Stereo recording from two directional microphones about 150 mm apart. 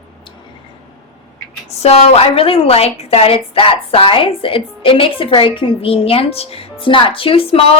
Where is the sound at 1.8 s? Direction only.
45° left (ahead or behind).